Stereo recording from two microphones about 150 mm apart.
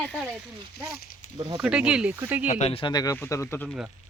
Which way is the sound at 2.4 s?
50° left (ahead or behind).